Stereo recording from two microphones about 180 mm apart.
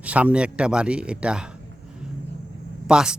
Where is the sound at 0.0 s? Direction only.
10° right (ahead or behind).